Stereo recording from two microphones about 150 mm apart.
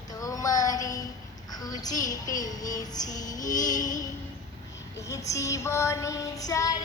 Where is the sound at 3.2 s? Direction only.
60° left (ahead or behind).